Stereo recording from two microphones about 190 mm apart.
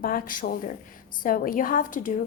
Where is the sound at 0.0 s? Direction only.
50° left (ahead or behind).